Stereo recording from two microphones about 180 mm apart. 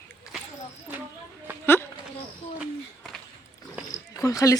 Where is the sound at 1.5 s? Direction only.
10° right (ahead or behind).